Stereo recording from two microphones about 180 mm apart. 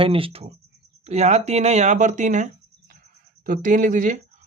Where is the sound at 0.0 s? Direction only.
30° right (ahead or behind).